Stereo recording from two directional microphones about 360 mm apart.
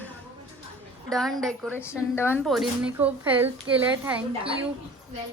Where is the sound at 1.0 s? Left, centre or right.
Centre.